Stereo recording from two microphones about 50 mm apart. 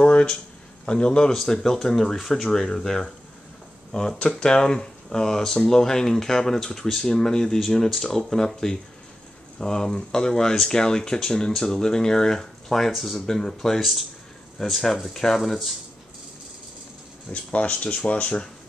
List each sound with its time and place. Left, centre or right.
0.0 s a sound: centre
0.8 s speech: centre
17.3 s speech: left